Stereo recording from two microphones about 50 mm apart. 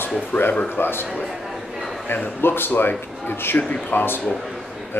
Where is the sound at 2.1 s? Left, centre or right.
Left.